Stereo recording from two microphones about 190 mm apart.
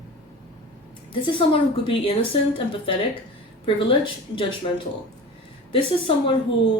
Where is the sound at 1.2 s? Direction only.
25° left (ahead or behind).